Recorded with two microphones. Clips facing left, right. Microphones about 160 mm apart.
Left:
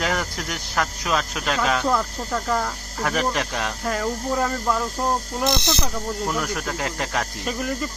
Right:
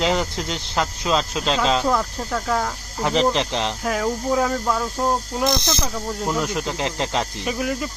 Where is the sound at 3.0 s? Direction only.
25° right (ahead or behind).